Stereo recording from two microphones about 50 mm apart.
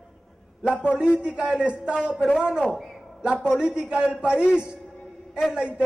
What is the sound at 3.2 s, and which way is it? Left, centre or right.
A man's voice, right.